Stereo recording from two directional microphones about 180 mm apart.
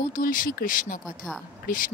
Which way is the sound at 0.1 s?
50° left (ahead or behind).